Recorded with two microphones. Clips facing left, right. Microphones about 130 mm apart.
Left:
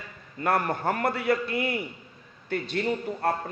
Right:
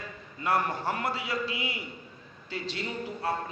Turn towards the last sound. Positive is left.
turn(degrees=55)  # may be behind; listen again after turning